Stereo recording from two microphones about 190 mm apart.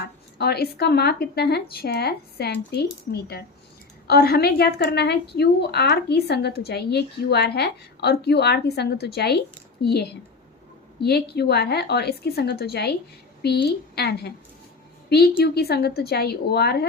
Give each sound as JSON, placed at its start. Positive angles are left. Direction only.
{"t": 0.3, "sound": "speech", "side_deg": 55}